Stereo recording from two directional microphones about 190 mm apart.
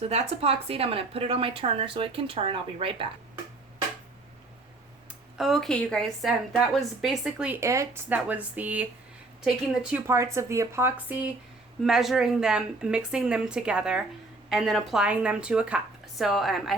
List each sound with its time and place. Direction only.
0.0 s speech: 35° right (ahead or behind)
5.4 s a woman's voice: centre (ahead or behind)